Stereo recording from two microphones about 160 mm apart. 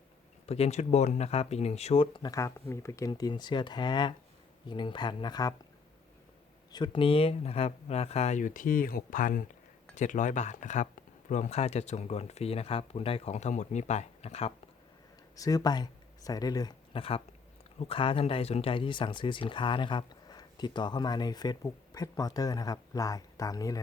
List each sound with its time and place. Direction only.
0.4 s speech: 40° left (ahead or behind); by 5.5 s 25° left (ahead or behind)
6.7 s speech: 30° left (ahead or behind)
15.4 s speech: 20° left (ahead or behind)